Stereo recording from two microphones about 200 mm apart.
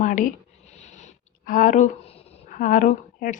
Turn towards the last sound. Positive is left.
turn(degrees=40)  # may be behind; listen again after turning